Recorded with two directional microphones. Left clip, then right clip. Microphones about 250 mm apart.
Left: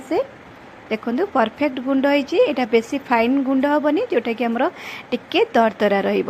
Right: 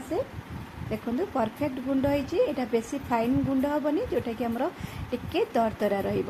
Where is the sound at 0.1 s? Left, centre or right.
Left.